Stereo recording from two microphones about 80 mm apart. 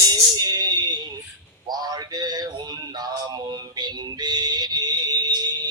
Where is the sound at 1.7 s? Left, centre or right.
Right.